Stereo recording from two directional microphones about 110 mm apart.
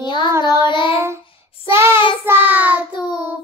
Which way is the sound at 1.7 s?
25° right (ahead or behind).